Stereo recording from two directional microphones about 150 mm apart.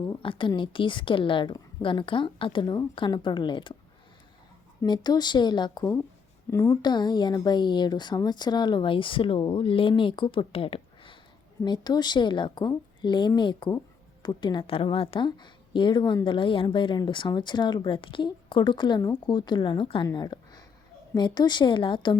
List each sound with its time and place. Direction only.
0.2 s a woman's voice: 35° left (ahead or behind)
4.8 s a woman's voice: 25° left (ahead or behind)
20.1 s a sound: 25° left (ahead or behind)
21.2 s a woman's voice: 30° left (ahead or behind)